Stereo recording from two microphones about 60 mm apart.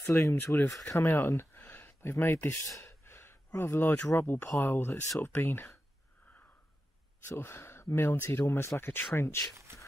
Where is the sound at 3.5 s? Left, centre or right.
Left.